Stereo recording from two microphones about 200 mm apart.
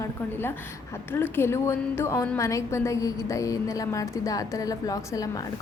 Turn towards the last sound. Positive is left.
turn(degrees=15)  # may be behind; listen again after turning